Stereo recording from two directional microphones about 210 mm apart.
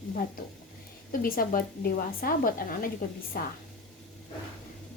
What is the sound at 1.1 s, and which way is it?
Speech, 45° left (ahead or behind).